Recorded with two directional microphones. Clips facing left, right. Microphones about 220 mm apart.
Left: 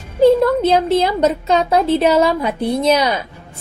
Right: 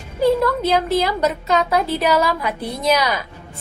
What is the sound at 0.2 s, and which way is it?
A woman's voice, 25° left (ahead or behind).